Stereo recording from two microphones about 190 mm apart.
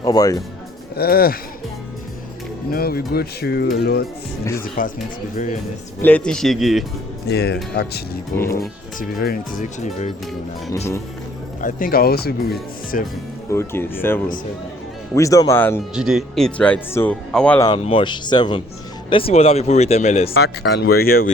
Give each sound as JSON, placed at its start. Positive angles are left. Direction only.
{"t": 0.0, "sound": "speech", "side_deg": 20}
{"t": 0.9, "sound": "speech", "side_deg": 55}
{"t": 2.7, "sound": "speech", "side_deg": 55}
{"t": 4.8, "sound": "speech", "side_deg": 45}
{"t": 6.0, "sound": "speech", "side_deg": 10}
{"t": 7.3, "sound": "speech", "side_deg": 60}
{"t": 11.6, "sound": "speech", "side_deg": 50}
{"t": 13.5, "sound": "speech", "side_deg": 15}
{"t": 16.0, "sound": "speech", "side_deg": 0}
{"t": 17.8, "sound": "speech", "side_deg": 25}
{"t": 20.3, "sound": "speech", "side_deg": 60}